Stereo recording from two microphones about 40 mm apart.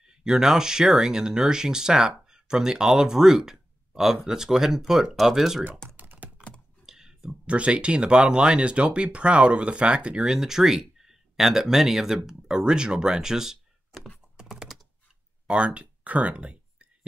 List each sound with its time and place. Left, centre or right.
0.0 s speech: centre
5.9 s computer keyboard: right
6.9 s a sound: centre
7.4 s speech: right; by 13.6 s centre
14.6 s computer keyboard: centre
15.4 s a sound: right